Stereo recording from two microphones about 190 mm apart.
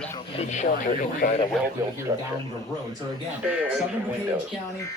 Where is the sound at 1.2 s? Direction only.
50° left (ahead or behind).